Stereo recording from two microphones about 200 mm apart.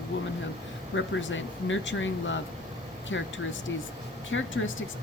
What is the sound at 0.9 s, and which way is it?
A woman's voice, 70° left (ahead or behind).